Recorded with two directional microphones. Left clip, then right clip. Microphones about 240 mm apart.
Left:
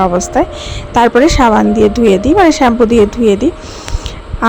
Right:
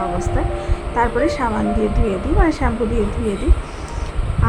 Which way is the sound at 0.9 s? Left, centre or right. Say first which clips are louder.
Left 10 dB; left.